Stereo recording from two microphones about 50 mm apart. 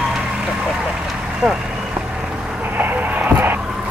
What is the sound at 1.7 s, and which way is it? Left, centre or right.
Vehicle, right.